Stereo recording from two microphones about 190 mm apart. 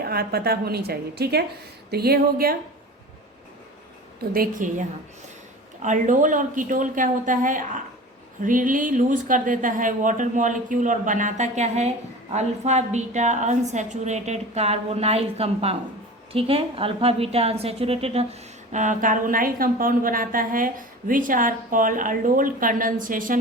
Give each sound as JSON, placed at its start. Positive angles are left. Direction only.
{"t": 0.0, "sound": "a woman's voice", "side_deg": -55}
{"t": 4.2, "sound": "a woman's voice", "side_deg": -50}